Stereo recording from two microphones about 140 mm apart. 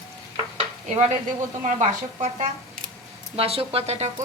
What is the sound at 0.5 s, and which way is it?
Stir, 55° right (ahead or behind).